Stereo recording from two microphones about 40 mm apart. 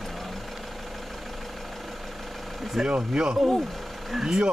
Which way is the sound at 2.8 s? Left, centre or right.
Centre.